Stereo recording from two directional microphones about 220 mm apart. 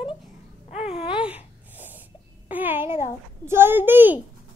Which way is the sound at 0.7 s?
30° left (ahead or behind).